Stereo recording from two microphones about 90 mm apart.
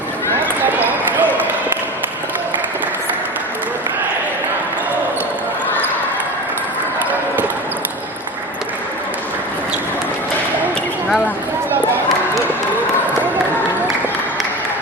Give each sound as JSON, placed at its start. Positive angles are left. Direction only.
{"t": 0.6, "sound": "basketball bounce", "side_deg": -20}